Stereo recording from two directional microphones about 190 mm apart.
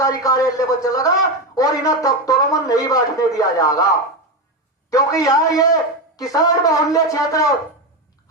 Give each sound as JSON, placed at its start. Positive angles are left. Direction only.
{"t": 0.0, "sound": "speech", "side_deg": 20}
{"t": 4.9, "sound": "a man's voice", "side_deg": 20}